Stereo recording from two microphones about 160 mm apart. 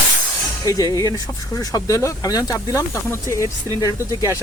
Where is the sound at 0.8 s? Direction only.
25° right (ahead or behind).